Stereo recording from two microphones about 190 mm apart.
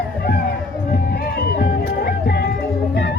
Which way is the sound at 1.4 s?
55° left (ahead or behind).